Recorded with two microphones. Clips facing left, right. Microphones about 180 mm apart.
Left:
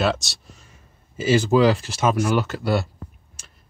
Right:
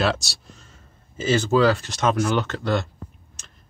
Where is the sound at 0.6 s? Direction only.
10° left (ahead or behind).